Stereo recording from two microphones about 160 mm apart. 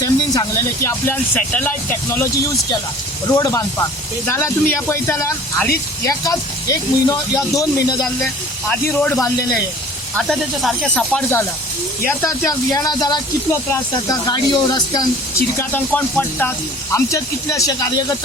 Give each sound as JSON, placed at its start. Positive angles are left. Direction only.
{"t": 0.0, "sound": "speech", "side_deg": 20}
{"t": 8.7, "sound": "speech", "side_deg": 10}
{"t": 10.2, "sound": "speech", "side_deg": 0}
{"t": 12.0, "sound": "speech", "side_deg": 15}
{"t": 15.5, "sound": "speech", "side_deg": 10}